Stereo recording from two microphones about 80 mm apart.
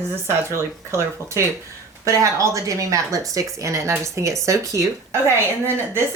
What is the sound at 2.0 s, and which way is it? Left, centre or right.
Speech, right.